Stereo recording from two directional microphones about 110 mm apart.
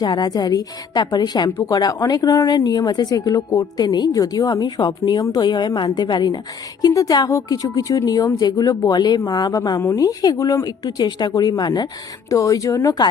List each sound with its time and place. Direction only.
0.0 s speech: 35° left (ahead or behind)